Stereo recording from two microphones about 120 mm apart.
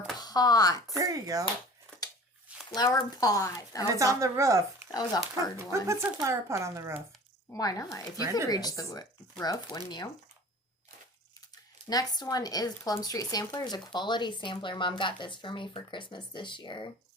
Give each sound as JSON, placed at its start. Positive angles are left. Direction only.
{"t": 0.2, "sound": "speech", "side_deg": 35}
{"t": 0.9, "sound": "speech", "side_deg": -30}
{"t": 2.7, "sound": "speech", "side_deg": 30}
{"t": 3.9, "sound": "speech", "side_deg": -25}
{"t": 4.9, "sound": "speech", "side_deg": 30}
{"t": 5.7, "sound": "speech", "side_deg": -25}
{"t": 7.5, "sound": "speech", "side_deg": 30}
{"t": 11.9, "sound": "speech", "side_deg": 30}